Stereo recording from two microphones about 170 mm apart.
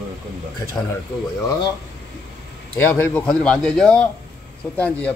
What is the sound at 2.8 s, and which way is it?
A man's voice, 10° left (ahead or behind).